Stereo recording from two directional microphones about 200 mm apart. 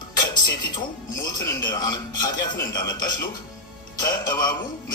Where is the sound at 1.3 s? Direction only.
15° left (ahead or behind).